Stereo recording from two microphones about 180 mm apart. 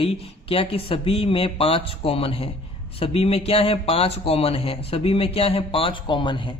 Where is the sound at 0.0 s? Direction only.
30° left (ahead or behind).